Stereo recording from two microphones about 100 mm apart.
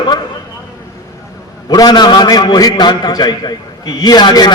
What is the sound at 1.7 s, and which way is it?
A man's voice, 45° left (ahead or behind).